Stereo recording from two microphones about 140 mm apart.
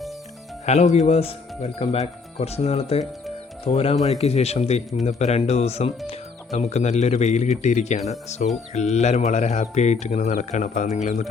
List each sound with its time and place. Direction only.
0.6 s speech: 50° left (ahead or behind)